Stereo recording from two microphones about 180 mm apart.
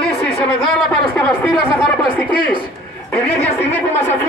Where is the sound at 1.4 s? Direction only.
5° left (ahead or behind).